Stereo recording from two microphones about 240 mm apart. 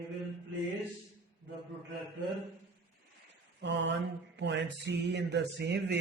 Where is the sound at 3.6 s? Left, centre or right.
Right.